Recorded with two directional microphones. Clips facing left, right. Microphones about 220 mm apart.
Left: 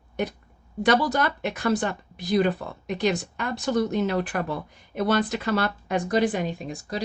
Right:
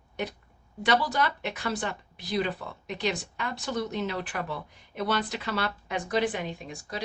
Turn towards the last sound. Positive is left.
turn(degrees=40)  # may be behind; listen again after turning